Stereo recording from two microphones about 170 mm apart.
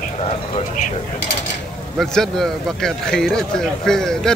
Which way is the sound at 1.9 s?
5° left (ahead or behind).